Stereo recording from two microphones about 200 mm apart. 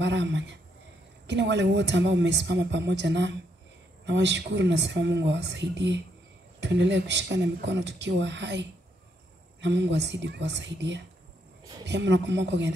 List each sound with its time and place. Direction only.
0.0 s a woman's voice: 60° right (ahead or behind)